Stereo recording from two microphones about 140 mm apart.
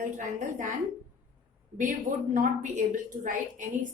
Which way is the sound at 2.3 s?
65° right (ahead or behind).